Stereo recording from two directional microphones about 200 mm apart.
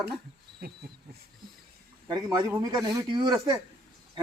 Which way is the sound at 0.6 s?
50° right (ahead or behind).